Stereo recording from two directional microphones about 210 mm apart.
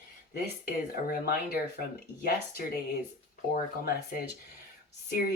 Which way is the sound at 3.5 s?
45° left (ahead or behind).